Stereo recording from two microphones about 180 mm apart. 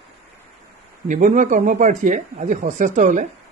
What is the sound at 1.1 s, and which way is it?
A man's voice, 45° right (ahead or behind).